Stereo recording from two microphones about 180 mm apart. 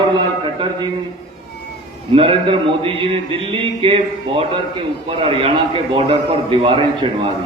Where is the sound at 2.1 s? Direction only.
30° right (ahead or behind).